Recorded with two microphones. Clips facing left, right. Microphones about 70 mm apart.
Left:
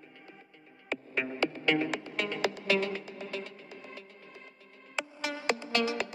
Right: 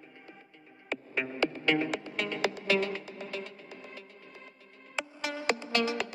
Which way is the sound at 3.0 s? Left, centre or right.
Left.